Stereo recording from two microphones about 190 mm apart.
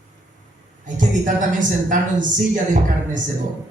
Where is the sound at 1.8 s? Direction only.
45° right (ahead or behind).